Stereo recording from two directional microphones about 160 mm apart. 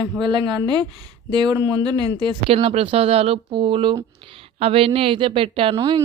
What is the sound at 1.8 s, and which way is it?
Speech, 25° right (ahead or behind).